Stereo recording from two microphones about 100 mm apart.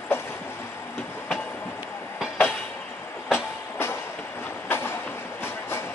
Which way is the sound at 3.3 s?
25° left (ahead or behind).